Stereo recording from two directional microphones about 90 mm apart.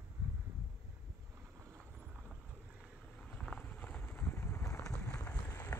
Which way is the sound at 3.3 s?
15° left (ahead or behind).